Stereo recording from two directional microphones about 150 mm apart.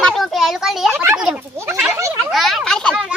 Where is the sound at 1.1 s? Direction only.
5° right (ahead or behind).